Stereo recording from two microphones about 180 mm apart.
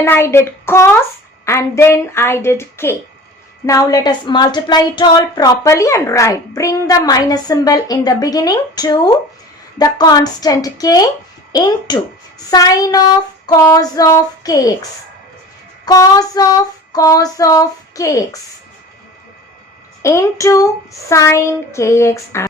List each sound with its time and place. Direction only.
0.0 s a woman's voice: 15° left (ahead or behind)
15.9 s a woman's voice: 20° left (ahead or behind)
20.0 s a woman's voice: 15° left (ahead or behind)